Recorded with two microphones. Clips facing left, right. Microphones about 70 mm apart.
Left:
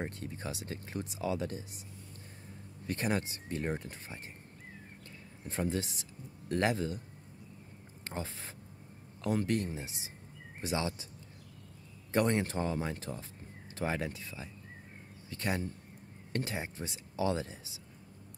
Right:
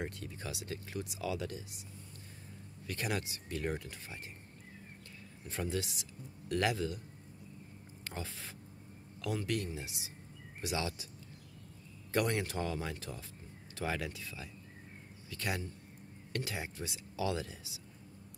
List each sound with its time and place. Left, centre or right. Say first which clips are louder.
0.0 s speech: left 2 dB; left
2.9 s speech: left 4 dB; left
5.4 s speech: left 3 dB; left
8.0 s speech: left 3 dB; left
12.1 s speech: left 3 dB; left